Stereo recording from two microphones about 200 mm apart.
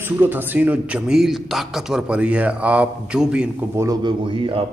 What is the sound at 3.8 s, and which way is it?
Speech, 25° right (ahead or behind).